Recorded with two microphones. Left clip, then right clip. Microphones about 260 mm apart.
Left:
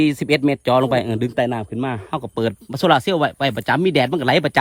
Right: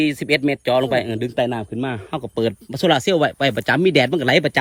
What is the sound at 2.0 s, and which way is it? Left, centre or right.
Speech, left.